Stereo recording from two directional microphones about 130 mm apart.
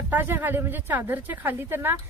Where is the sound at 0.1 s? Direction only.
15° right (ahead or behind).